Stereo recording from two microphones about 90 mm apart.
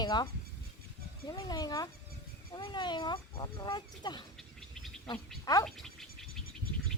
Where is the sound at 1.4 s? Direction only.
45° left (ahead or behind).